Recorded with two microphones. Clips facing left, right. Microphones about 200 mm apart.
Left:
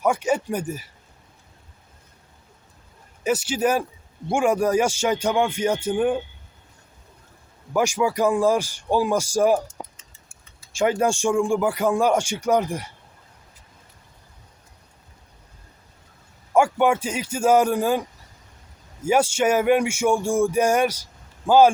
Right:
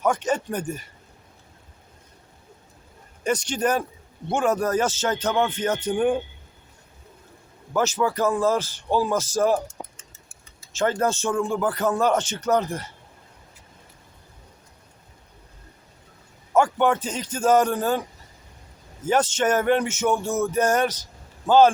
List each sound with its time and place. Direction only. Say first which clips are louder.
0.0 s speech: left 2 dB; 10° left (ahead or behind)
3.2 s speech: left 2 dB; 5° left (ahead or behind)
7.7 s speech: left 1 dB; 10° left (ahead or behind)
9.6 s a sound: even; 45° right (ahead or behind)
10.7 s speech: left 2 dB; 10° left (ahead or behind)
16.6 s speech: left 1 dB; 10° left (ahead or behind)
19.0 s speech: left 2 dB; 10° left (ahead or behind)